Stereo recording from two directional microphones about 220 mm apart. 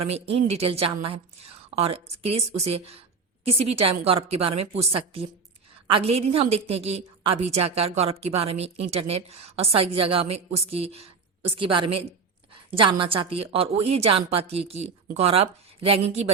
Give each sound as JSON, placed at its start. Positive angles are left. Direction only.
{"t": 0.0, "sound": "a woman's voice", "side_deg": -25}